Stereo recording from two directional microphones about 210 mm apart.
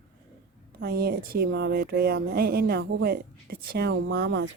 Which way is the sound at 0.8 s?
50° right (ahead or behind).